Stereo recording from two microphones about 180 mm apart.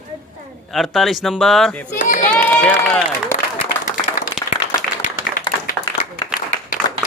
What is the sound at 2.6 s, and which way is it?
Speech, 5° left (ahead or behind).